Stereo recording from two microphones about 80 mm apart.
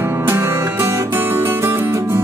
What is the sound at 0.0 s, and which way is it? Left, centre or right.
Music, right.